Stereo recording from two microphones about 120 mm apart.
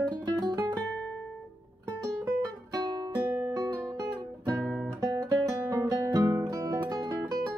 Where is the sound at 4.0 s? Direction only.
30° right (ahead or behind).